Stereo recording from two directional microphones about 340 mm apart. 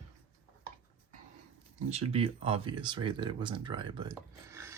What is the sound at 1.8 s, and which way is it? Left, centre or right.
Speech, centre.